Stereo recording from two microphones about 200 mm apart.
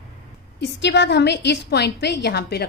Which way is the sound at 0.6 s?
60° left (ahead or behind).